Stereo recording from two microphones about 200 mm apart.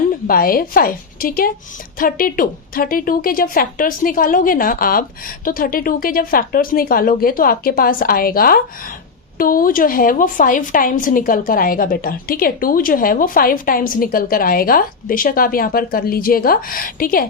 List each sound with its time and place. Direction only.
0.3 s a woman's voice: 45° left (ahead or behind)